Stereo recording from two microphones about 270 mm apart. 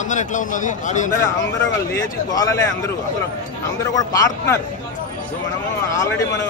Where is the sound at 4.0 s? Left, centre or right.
Centre.